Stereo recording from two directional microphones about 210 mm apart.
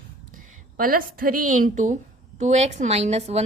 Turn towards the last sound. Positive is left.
turn(degrees=-30)  # may be behind; listen again after turning